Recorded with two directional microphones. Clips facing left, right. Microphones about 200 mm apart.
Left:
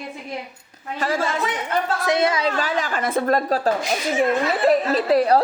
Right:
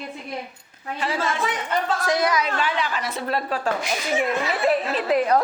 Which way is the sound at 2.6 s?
40° left (ahead or behind).